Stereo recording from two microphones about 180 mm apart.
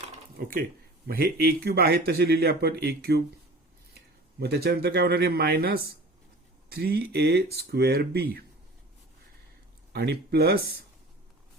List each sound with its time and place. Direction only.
0.3 s speech: 55° right (ahead or behind)
4.4 s speech: 60° right (ahead or behind)
9.9 s speech: 60° right (ahead or behind)